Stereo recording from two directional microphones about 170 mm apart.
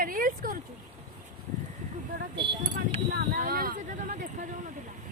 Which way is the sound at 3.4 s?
60° right (ahead or behind).